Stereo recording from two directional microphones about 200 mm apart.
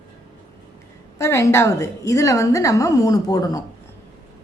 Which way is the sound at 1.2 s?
15° left (ahead or behind).